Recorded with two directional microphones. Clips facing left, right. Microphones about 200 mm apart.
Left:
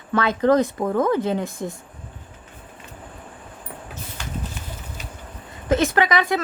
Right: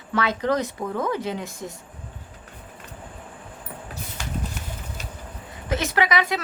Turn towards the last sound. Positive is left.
turn(degrees=50)  # may be behind; listen again after turning